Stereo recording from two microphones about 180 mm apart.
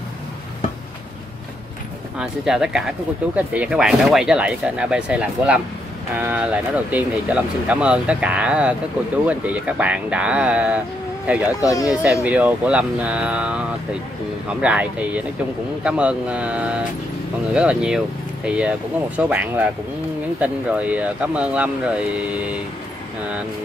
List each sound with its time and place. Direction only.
2.1 s speech: 5° right (ahead or behind)
11.6 s speech: 20° left (ahead or behind)
11.9 s speech: 5° right (ahead or behind)